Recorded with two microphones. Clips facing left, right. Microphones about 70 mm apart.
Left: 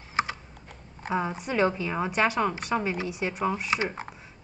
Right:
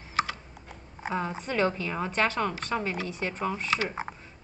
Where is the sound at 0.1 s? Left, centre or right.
Left.